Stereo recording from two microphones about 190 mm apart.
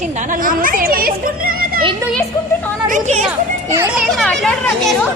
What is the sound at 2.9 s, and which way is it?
Speech, 40° right (ahead or behind).